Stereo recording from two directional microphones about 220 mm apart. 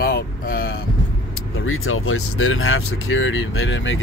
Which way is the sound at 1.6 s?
65° left (ahead or behind).